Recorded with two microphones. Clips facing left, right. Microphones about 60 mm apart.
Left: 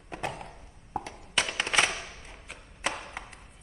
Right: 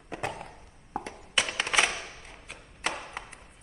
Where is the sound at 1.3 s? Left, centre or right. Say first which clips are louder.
Even; centre.